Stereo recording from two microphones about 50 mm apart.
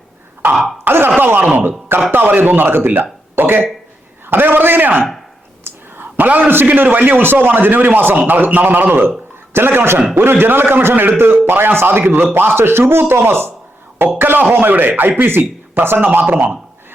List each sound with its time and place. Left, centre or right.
0.9 s speech: right
5.6 s whispering: right
6.2 s speech: right
6.5 s a man's voice: right